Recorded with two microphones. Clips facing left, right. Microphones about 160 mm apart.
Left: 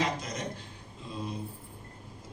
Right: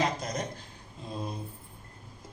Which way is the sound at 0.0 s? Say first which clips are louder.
Right 2 dB; 40° right (ahead or behind).